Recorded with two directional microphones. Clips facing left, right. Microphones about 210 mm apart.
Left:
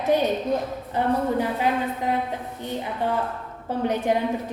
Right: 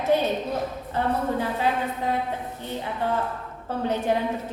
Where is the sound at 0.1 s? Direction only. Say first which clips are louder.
Left 1 dB; 15° left (ahead or behind).